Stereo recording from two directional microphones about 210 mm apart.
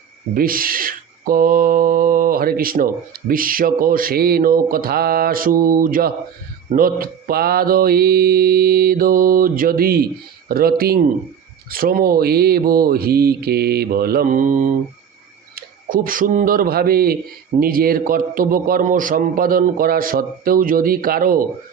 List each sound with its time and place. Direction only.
0.3 s a man's voice: 45° right (ahead or behind)